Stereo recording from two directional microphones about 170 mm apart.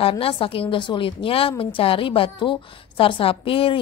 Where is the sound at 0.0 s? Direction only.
30° left (ahead or behind).